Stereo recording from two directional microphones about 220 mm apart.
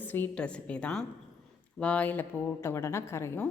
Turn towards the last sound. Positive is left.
turn(degrees=10)  # may be behind; listen again after turning